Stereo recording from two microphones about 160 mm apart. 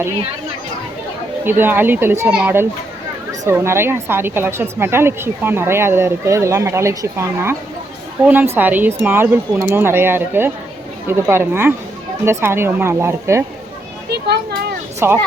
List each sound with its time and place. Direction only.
1.5 s a woman's voice: 15° right (ahead or behind)
8.5 s a woman's voice: 10° right (ahead or behind)
14.9 s a woman's voice: 15° right (ahead or behind)